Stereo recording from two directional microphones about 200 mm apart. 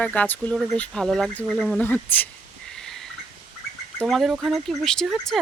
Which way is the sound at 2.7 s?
Centre (ahead or behind).